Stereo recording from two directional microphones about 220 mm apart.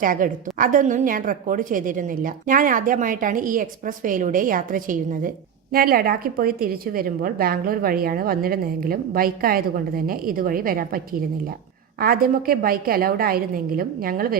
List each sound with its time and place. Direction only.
0.0 s a woman's voice: 40° right (ahead or behind)